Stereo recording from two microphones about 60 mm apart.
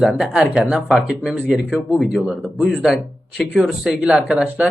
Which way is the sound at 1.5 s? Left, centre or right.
Centre.